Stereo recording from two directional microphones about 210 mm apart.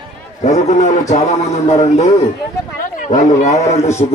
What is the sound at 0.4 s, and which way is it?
A man's voice, 35° left (ahead or behind).